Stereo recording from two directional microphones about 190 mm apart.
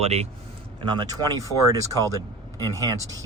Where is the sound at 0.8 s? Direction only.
25° right (ahead or behind).